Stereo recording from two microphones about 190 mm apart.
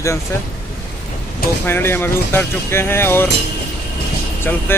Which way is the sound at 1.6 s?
10° left (ahead or behind).